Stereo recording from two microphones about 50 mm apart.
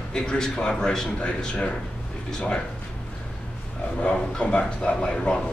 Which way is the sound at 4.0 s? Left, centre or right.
Left.